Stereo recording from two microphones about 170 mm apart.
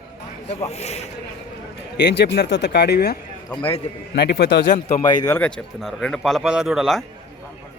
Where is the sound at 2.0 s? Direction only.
85° left.